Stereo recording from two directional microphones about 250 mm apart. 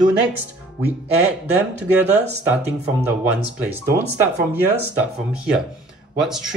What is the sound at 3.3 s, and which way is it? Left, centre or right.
Speech, centre.